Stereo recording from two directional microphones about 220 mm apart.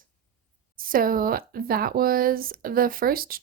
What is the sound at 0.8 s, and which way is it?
Speech, 40° right (ahead or behind).